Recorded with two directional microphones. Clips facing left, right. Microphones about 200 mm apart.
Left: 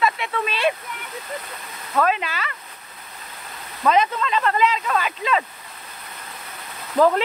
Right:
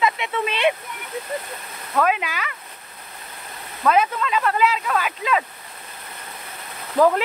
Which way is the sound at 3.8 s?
5° right (ahead or behind).